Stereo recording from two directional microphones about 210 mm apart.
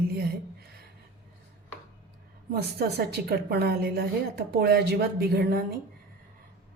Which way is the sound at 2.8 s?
50° right (ahead or behind).